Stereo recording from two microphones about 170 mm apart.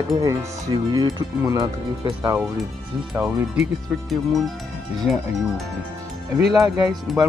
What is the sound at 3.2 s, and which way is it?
Speech, 15° right (ahead or behind).